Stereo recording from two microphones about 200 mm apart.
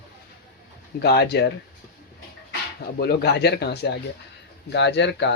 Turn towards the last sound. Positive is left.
turn(degrees=60)  # may be behind; listen again after turning